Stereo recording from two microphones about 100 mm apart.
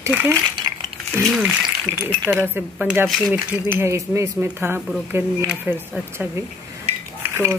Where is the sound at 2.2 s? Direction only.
20° right (ahead or behind).